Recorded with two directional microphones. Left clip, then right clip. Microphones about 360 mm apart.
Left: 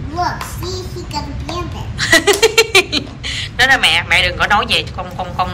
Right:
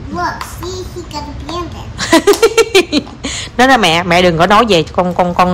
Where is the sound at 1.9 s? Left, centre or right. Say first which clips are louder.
Right 2 dB; centre.